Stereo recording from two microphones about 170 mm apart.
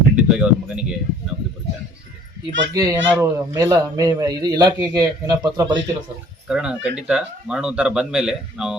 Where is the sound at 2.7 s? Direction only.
20° right (ahead or behind).